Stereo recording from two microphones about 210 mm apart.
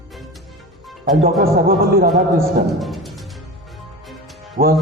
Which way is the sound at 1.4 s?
45° right (ahead or behind).